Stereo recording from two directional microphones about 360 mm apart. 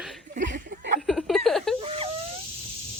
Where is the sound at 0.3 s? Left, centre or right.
Right.